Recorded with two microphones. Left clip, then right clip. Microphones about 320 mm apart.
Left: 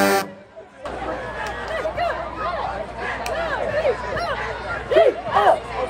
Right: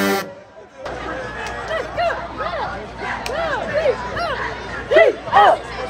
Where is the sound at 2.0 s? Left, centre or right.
Right.